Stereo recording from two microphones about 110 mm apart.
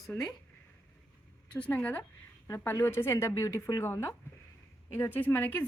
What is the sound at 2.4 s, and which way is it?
A woman's voice, 25° left (ahead or behind).